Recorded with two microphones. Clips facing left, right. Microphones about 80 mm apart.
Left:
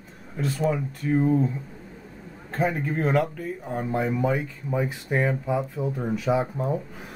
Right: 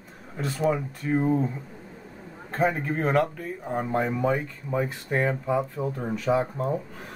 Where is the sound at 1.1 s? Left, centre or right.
Centre.